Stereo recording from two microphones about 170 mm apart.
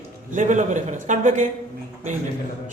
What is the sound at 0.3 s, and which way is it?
Speech, 45° right (ahead or behind).